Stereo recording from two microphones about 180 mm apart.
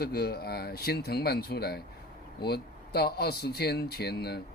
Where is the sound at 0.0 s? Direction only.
60° left (ahead or behind).